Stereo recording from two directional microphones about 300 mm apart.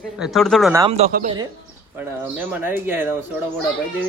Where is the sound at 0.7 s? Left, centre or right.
Centre.